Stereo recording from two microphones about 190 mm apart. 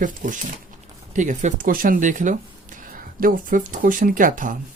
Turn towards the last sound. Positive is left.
turn(degrees=-45)  # may be behind; listen again after turning